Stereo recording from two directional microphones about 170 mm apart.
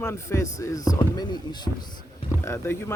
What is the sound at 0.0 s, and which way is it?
Speech, 15° left (ahead or behind).